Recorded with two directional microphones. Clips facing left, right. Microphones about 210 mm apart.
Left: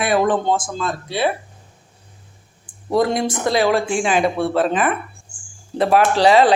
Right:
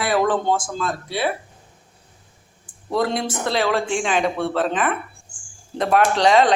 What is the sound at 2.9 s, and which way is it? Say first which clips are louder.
Speech: left 4 dB; 15° left (ahead or behind).